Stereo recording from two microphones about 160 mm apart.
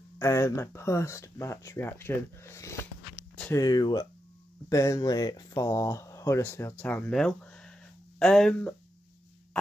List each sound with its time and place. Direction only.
0.2 s speech: 15° left (ahead or behind)